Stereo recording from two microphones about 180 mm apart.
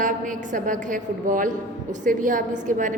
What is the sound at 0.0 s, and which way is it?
A woman's voice, 45° right (ahead or behind).